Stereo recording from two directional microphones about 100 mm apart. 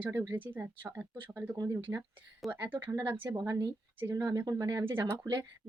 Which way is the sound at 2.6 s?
20° right (ahead or behind).